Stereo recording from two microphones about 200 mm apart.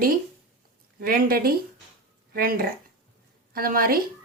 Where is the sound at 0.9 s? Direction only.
45° right (ahead or behind).